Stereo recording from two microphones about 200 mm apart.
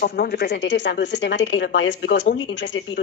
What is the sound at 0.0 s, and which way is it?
Speech, 50° left (ahead or behind).